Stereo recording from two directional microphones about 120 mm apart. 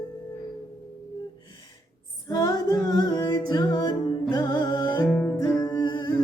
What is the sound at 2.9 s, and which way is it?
Music, 35° left (ahead or behind).